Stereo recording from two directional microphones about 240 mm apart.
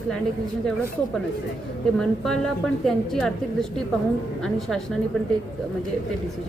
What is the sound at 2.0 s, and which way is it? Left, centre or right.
A woman's voice, centre.